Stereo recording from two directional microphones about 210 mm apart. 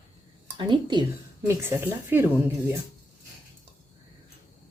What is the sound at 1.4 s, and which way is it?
Speech, 10° right (ahead or behind).